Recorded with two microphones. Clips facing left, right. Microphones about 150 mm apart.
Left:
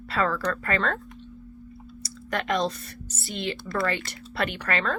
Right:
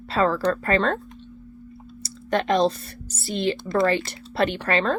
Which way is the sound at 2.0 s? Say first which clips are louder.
Right 6 dB; 30° right (ahead or behind).